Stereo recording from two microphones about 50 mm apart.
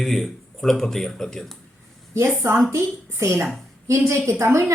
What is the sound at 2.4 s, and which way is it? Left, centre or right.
A woman's voice, right.